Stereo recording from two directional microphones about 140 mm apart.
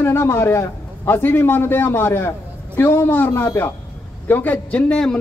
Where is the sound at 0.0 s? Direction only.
20° left (ahead or behind).